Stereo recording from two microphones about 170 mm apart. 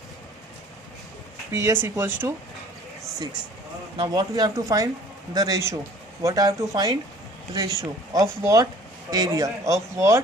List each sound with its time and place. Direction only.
1.5 s speech: 15° right (ahead or behind)
3.9 s speech: 25° right (ahead or behind)